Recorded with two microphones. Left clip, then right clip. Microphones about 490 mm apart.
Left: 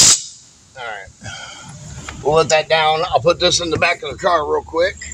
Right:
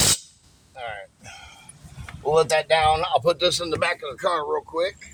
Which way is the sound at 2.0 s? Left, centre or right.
Right.